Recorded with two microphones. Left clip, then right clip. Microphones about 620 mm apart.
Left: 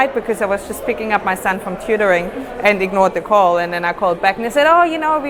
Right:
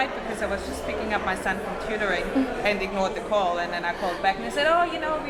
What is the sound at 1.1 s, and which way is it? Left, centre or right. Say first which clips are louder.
A man's voice: left 9 dB; left.